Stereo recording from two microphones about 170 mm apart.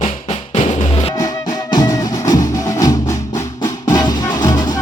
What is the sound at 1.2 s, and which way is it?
Music, 25° left (ahead or behind).